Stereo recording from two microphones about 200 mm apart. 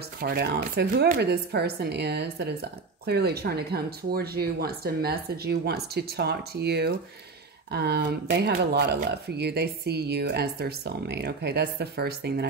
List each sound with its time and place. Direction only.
0.2 s speech: 50° right (ahead or behind)